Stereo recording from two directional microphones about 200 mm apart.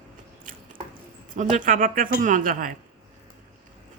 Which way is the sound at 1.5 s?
40° right (ahead or behind).